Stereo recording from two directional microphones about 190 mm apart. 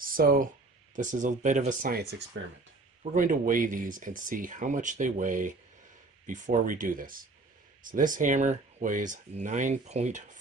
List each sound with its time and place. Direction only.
0.0 s speech: 50° right (ahead or behind)
2.3 s speech: 80° right
3.0 s speech: 45° right (ahead or behind)